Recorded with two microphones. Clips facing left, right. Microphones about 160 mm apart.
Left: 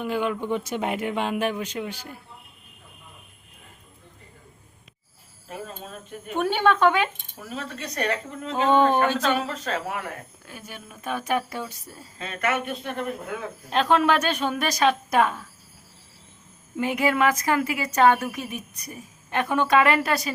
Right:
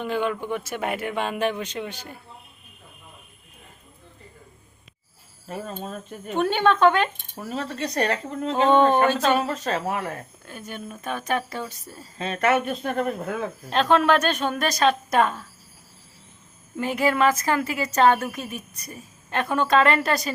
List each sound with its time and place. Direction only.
0.0 s a woman's voice: 10° left (ahead or behind)
5.5 s a woman's voice: 40° right (ahead or behind)
6.3 s a woman's voice: 10° left (ahead or behind)
7.5 s a woman's voice: 35° right (ahead or behind)
10.4 s a woman's voice: 10° left (ahead or behind)
12.2 s a woman's voice: 30° right (ahead or behind)
13.7 s a woman's voice: 10° left (ahead or behind)
16.7 s a woman's voice: 15° left (ahead or behind)